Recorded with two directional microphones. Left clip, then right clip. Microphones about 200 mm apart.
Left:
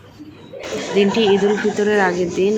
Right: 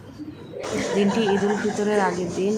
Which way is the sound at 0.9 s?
5° left (ahead or behind).